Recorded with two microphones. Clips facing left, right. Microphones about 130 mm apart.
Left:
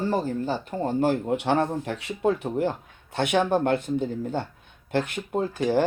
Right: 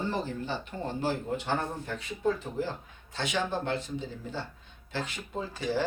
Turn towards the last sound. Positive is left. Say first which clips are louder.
# left 8 dB
turn(degrees=55)  # may be behind; listen again after turning